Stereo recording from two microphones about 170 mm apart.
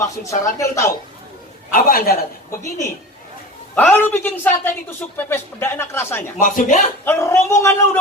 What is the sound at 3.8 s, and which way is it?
A man's voice, 10° left (ahead or behind).